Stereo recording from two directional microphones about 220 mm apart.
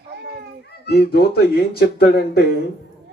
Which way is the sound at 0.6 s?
45° left (ahead or behind).